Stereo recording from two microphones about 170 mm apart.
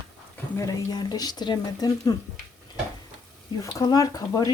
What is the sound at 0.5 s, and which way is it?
Speech, 20° left (ahead or behind).